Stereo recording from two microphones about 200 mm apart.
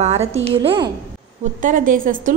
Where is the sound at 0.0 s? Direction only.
30° right (ahead or behind).